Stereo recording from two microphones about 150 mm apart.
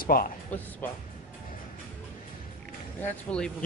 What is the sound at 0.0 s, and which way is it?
Speech, 75° left (ahead or behind).